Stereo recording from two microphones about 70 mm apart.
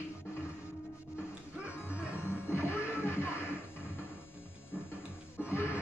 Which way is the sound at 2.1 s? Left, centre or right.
Left.